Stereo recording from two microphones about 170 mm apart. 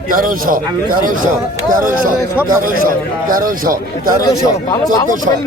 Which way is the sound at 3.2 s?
55° right (ahead or behind).